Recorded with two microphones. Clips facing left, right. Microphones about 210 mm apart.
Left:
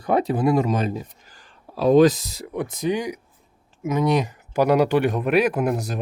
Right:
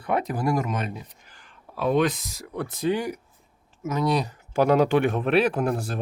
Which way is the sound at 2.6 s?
15° left (ahead or behind).